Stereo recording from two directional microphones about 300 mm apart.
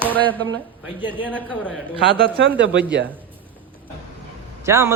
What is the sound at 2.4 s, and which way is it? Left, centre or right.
Speech, right.